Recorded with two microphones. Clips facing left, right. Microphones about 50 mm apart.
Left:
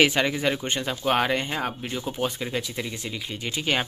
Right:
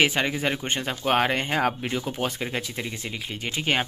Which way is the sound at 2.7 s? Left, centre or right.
Right.